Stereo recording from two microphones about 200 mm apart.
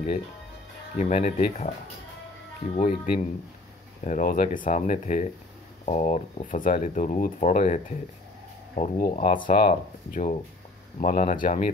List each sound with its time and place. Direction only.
0.9 s speech: 35° left (ahead or behind)
2.7 s speech: 40° left (ahead or behind)